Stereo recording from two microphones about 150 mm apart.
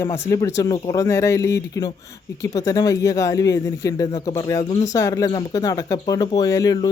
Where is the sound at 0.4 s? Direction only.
20° left (ahead or behind).